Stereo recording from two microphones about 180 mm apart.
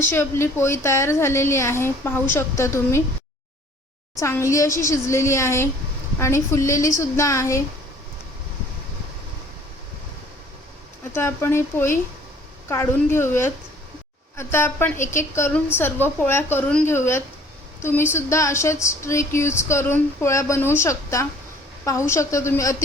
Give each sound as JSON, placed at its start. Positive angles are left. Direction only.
{"t": 0.0, "sound": "speech", "side_deg": 10}
{"t": 4.2, "sound": "speech", "side_deg": 15}
{"t": 11.1, "sound": "speech", "side_deg": 15}